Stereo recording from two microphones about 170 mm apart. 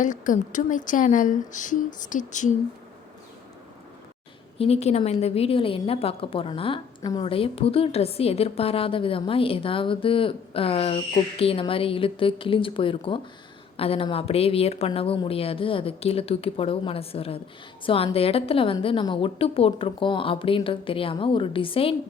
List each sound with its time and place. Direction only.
0.0 s speech: 50° left (ahead or behind)
4.5 s a woman's voice: 35° left (ahead or behind)